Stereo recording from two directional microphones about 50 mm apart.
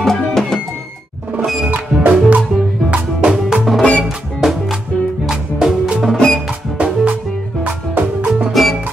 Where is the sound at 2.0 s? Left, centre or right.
Right.